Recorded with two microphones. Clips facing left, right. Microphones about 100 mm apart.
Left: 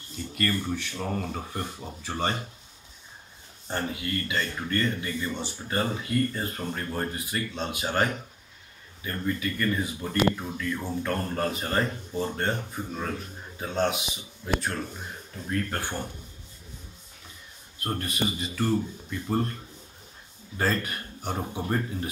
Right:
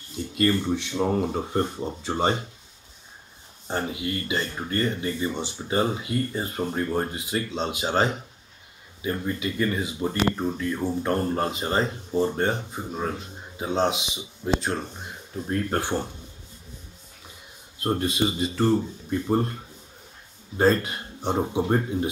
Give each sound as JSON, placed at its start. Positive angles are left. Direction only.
{"t": 0.1, "sound": "speech", "side_deg": -20}
{"t": 3.7, "sound": "speech", "side_deg": -20}
{"t": 17.7, "sound": "speech", "side_deg": -20}